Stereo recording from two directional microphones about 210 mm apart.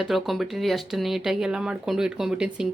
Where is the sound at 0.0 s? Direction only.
Centre (ahead or behind).